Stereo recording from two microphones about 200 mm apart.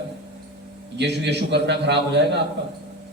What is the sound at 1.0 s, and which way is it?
A man's voice, 60° right (ahead or behind).